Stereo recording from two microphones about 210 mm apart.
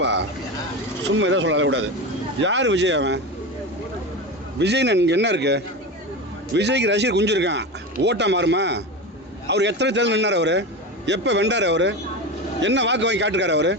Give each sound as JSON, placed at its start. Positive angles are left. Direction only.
{"t": 0.0, "sound": "vehicle", "side_deg": -55}
{"t": 1.1, "sound": "a man's voice", "side_deg": -60}
{"t": 4.6, "sound": "a man's voice", "side_deg": -55}